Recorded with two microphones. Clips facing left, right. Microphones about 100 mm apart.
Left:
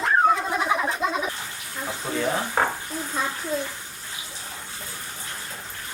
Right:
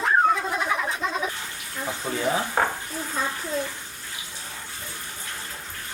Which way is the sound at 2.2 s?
5° right (ahead or behind).